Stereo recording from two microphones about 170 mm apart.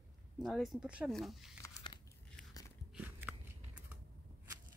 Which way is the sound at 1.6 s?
25° left (ahead or behind).